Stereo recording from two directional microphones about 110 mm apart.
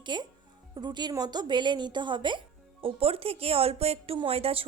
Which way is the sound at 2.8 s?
60° right (ahead or behind).